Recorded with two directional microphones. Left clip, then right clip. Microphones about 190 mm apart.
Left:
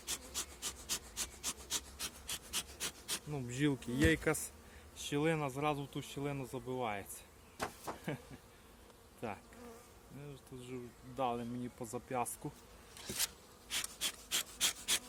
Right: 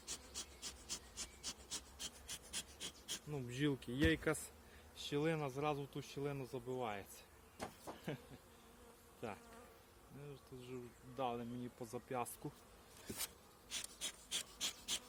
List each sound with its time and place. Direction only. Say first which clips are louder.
0.0 s rub: left 7 dB; 20° left (ahead or behind)
5.0 s speech: left 5 dB; 15° left (ahead or behind)
7.6 s a sound: left 7 dB; 20° left (ahead or behind)
9.2 s speech: left 5 dB; 20° left (ahead or behind)
11.2 s speech: left 5 dB; 20° left (ahead or behind)
13.7 s a sound: left 8 dB; 15° left (ahead or behind)